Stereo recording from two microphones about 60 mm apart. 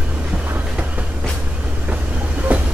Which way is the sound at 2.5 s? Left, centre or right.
Right.